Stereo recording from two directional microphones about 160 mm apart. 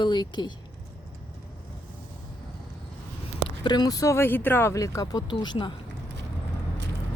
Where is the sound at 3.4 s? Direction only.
30° left (ahead or behind).